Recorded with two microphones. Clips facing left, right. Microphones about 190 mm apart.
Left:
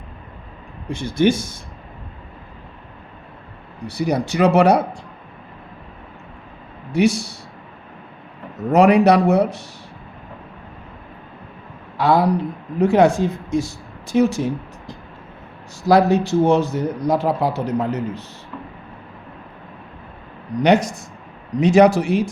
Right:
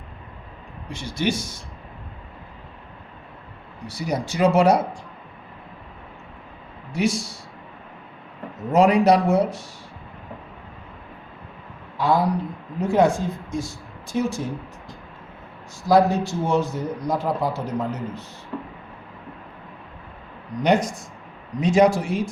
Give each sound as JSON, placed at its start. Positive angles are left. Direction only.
{"t": 0.9, "sound": "speech", "side_deg": 55}
{"t": 3.8, "sound": "speech", "side_deg": 65}
{"t": 6.9, "sound": "speech", "side_deg": 65}
{"t": 8.7, "sound": "speech", "side_deg": 70}
{"t": 11.9, "sound": "speech", "side_deg": 75}
{"t": 20.6, "sound": "speech", "side_deg": 75}